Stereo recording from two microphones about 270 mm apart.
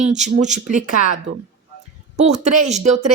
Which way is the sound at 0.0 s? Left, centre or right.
Right.